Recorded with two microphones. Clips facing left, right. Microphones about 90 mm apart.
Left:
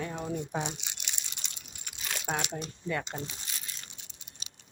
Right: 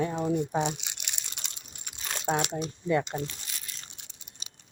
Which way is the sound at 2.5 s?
20° right (ahead or behind).